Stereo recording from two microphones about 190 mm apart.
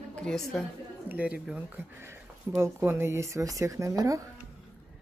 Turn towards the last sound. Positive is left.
turn(degrees=-15)  # may be behind; listen again after turning